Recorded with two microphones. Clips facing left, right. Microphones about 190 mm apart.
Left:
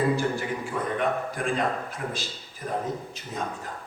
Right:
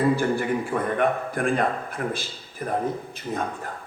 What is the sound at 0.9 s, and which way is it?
A man's voice, 55° right (ahead or behind).